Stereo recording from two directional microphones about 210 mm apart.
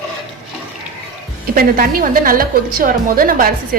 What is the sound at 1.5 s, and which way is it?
A woman's voice, 45° right (ahead or behind).